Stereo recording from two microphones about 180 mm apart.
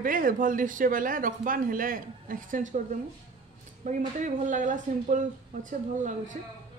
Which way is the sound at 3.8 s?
40° right (ahead or behind).